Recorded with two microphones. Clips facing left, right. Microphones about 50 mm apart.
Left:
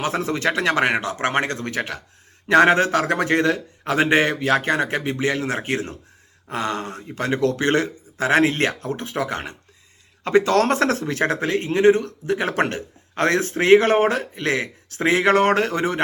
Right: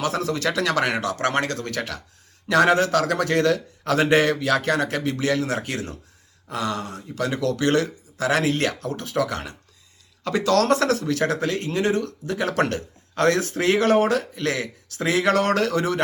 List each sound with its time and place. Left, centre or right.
0.0 s a man's voice: left